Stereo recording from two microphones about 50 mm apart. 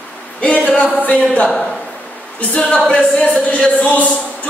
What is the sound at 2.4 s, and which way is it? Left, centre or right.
Speech, left.